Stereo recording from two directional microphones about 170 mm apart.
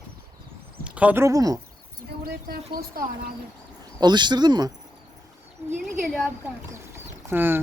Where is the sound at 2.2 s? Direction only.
60° right (ahead or behind).